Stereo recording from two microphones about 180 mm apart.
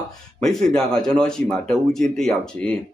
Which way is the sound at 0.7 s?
5° left (ahead or behind).